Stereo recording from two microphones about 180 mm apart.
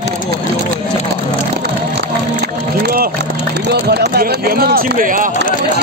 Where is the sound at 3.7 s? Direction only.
65° right (ahead or behind).